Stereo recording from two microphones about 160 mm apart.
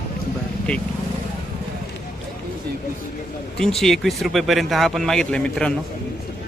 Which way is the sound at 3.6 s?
Centre (ahead or behind).